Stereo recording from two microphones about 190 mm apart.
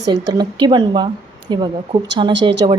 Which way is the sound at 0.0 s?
25° right (ahead or behind).